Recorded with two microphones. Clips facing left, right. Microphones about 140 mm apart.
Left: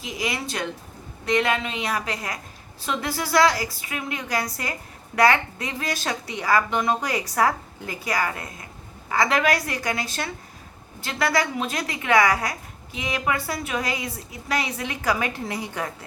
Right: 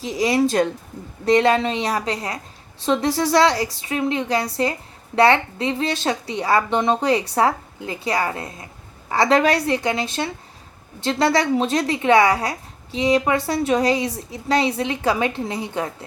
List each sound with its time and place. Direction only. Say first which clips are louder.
0.0 s a woman's voice: right 10 dB; 35° right (ahead or behind)